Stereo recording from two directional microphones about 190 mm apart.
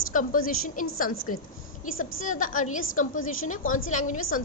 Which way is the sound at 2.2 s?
45° left (ahead or behind).